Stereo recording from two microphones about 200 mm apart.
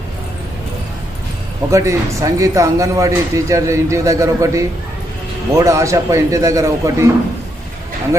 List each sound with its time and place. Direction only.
1.7 s a man's voice: 15° right (ahead or behind)